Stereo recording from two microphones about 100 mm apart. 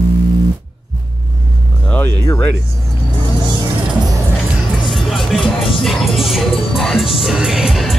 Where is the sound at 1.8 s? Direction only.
20° left (ahead or behind).